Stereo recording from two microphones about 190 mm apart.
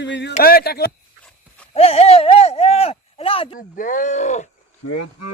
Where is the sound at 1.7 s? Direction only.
35° left (ahead or behind).